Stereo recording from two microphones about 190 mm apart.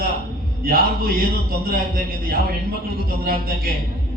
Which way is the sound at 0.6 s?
50° right (ahead or behind).